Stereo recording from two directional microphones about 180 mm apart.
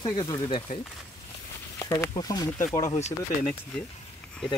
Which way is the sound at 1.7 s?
20° left (ahead or behind).